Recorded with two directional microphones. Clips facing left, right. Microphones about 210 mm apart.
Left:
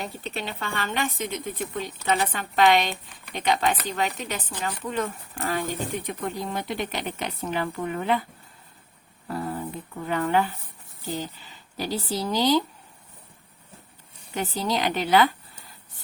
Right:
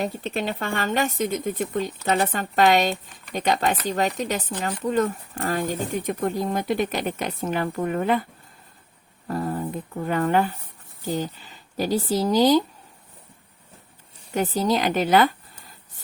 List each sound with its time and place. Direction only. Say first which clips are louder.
0.3 s speech: right 5 dB; 45° right (ahead or behind)
9.2 s speech: right 4 dB; 45° right (ahead or behind)
14.3 s speech: right 5 dB; 45° right (ahead or behind)